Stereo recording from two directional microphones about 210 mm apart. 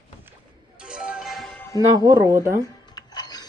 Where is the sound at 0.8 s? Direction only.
5° right (ahead or behind).